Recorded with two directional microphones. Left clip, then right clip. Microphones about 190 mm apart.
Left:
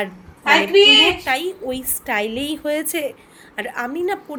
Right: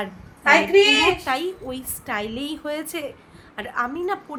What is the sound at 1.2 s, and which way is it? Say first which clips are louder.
A woman's voice: left 4 dB; 5° left (ahead or behind).